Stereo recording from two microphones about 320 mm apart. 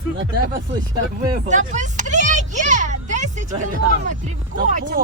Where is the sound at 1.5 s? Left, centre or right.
Right.